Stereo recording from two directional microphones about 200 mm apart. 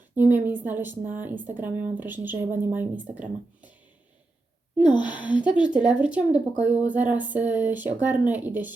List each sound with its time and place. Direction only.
0.2 s speech: 10° right (ahead or behind)
4.8 s speech: 20° left (ahead or behind)
5.4 s speech: 5° right (ahead or behind)